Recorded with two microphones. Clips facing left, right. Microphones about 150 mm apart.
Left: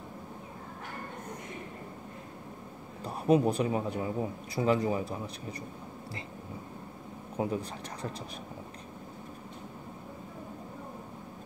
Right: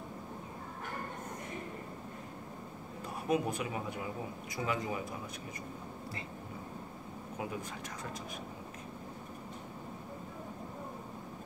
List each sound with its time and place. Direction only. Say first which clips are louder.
3.3 s speech: left 8 dB; 35° left (ahead or behind)
7.4 s speech: left 9 dB; 35° left (ahead or behind)